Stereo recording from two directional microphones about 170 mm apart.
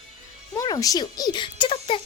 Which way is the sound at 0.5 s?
20° left (ahead or behind).